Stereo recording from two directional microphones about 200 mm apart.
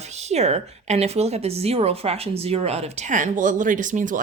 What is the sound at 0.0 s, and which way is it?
A woman's voice, 35° right (ahead or behind).